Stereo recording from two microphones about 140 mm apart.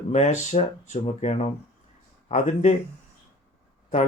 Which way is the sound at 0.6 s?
45° left (ahead or behind).